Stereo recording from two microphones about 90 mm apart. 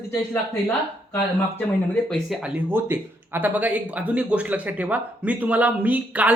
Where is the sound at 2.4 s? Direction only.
25° right (ahead or behind).